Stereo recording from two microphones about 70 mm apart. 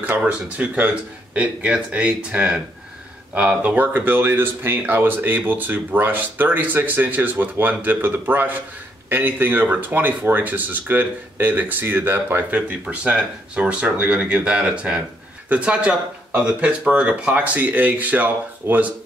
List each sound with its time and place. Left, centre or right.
0.0 s speech: right